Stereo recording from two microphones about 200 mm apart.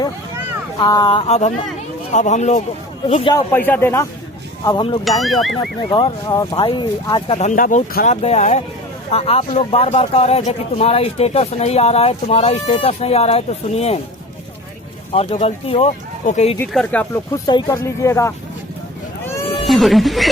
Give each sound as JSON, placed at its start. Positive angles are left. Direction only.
{"t": 0.8, "sound": "speech", "side_deg": 20}
{"t": 2.1, "sound": "speech", "side_deg": 35}
{"t": 3.3, "sound": "speech", "side_deg": 10}
{"t": 4.6, "sound": "speech", "side_deg": 25}
{"t": 5.2, "sound": "speech", "side_deg": 0}
{"t": 5.5, "sound": "speech", "side_deg": 25}
{"t": 15.1, "sound": "speech", "side_deg": 30}
{"t": 16.6, "sound": "speech", "side_deg": 10}
{"t": 17.4, "sound": "speech", "side_deg": 20}
{"t": 19.2, "sound": "cat", "side_deg": 15}
{"t": 19.6, "sound": "speech", "side_deg": 0}